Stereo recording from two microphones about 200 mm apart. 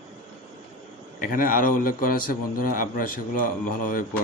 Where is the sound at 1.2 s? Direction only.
45° left (ahead or behind).